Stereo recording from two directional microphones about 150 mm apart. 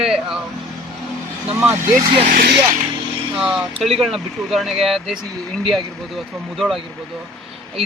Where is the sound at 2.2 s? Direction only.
75° right (ahead or behind).